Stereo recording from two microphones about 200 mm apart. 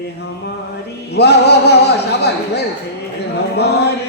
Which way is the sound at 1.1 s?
55° left (ahead or behind).